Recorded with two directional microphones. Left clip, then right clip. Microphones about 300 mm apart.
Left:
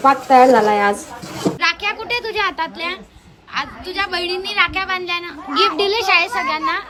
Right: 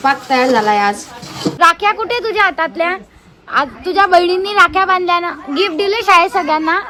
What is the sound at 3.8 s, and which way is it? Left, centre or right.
A woman's voice, centre.